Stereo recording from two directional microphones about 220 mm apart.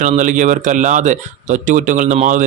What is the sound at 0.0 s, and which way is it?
Speech, 35° right (ahead or behind).